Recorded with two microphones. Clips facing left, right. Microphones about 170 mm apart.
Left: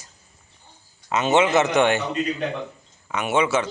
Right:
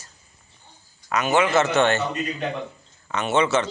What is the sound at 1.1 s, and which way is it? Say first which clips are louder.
A man's voice: left 2 dB; 25° left (ahead or behind).